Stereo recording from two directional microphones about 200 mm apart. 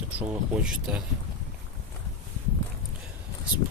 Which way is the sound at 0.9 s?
5° right (ahead or behind).